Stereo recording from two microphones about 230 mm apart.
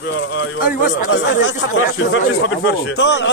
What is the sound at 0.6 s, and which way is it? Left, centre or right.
Speech, left.